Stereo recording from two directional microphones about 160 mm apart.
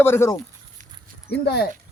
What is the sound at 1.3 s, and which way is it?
Speech, 90° left.